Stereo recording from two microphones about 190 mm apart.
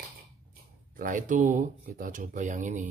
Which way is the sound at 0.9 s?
45° right (ahead or behind).